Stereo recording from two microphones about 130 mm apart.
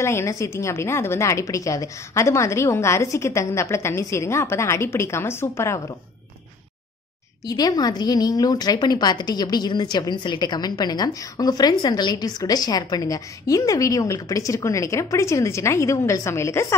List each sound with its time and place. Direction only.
0.0 s a woman's voice: 20° left (ahead or behind)
7.4 s a woman's voice: 30° left (ahead or behind)